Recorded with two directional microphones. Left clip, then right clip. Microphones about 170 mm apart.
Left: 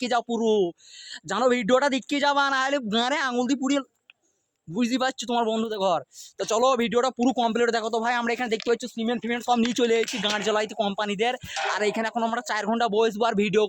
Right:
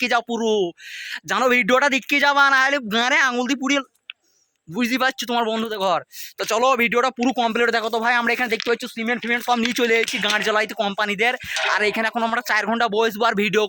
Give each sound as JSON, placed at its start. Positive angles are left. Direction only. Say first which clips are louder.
{"t": 0.0, "sound": "speech", "louder": "right 4 dB", "side_deg": -15}
{"t": 9.2, "sound": "speech", "louder": "right 3 dB", "side_deg": -10}